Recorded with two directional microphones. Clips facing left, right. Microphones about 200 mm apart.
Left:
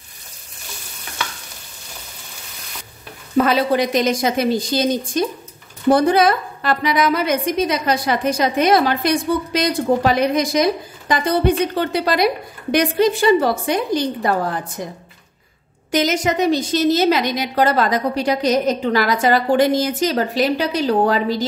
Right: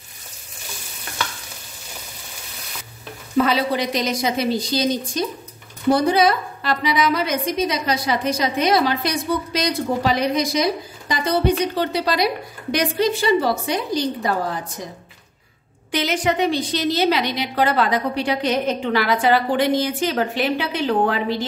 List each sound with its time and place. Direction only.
3.3 s a woman's voice: 50° left (ahead or behind)
15.9 s a woman's voice: 45° left (ahead or behind)